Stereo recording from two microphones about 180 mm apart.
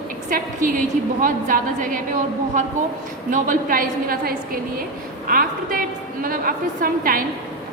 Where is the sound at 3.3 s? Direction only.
50° right (ahead or behind).